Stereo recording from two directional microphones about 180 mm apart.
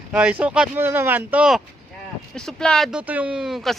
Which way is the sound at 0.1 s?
5° right (ahead or behind).